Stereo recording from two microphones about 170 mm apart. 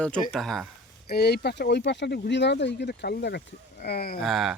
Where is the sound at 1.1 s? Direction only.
70° left (ahead or behind).